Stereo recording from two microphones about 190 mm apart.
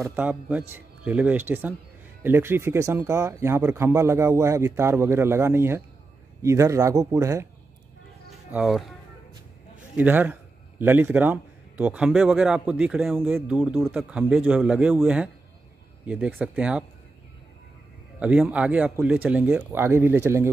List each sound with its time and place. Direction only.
0.0 s speech: 10° right (ahead or behind)
8.5 s speech: 5° right (ahead or behind)
9.9 s speech: 10° right (ahead or behind)
18.2 s speech: 5° right (ahead or behind)